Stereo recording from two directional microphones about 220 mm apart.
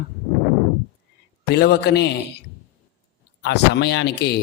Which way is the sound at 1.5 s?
50° left (ahead or behind).